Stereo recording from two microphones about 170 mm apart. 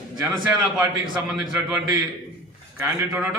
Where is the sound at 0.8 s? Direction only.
10° right (ahead or behind).